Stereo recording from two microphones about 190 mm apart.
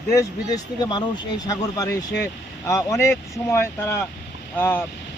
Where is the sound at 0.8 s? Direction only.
20° left (ahead or behind).